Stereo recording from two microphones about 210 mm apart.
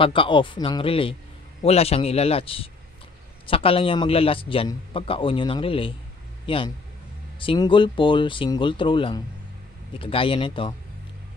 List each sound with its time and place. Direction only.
0.0 s a man's voice: 25° left (ahead or behind)